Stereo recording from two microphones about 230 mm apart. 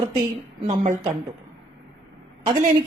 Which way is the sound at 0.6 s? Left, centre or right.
Right.